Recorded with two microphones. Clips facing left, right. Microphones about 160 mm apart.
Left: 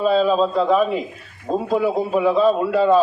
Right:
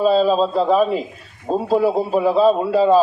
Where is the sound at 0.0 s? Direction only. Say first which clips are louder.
Right 1 dB; 35° right (ahead or behind).